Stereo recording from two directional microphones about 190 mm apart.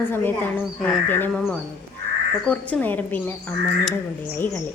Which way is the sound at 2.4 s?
10° left (ahead or behind).